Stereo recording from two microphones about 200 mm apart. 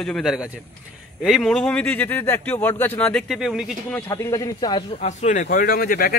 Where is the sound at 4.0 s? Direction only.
15° left (ahead or behind).